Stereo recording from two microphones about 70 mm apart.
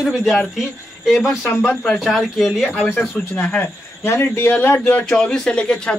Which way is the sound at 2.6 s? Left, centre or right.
Left.